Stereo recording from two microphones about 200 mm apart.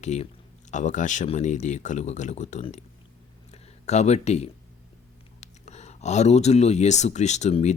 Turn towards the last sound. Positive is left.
turn(degrees=35)  # may be behind; listen again after turning